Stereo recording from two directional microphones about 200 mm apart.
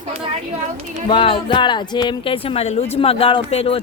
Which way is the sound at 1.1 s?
25° left (ahead or behind).